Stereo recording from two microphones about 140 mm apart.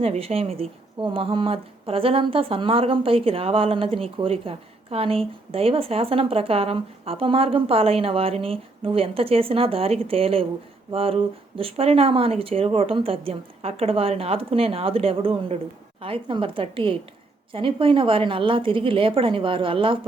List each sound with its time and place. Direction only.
0.0 s speech: 45° right (ahead or behind)